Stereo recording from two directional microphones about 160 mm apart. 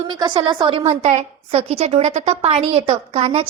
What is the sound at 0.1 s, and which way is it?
Speech, 30° right (ahead or behind).